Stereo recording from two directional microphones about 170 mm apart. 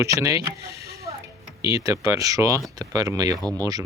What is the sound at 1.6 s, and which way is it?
Speech, 20° right (ahead or behind).